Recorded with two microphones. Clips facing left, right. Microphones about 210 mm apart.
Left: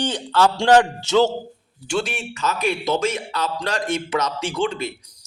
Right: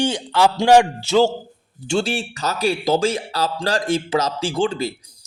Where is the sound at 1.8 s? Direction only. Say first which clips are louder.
Right 3 dB; 25° right (ahead or behind).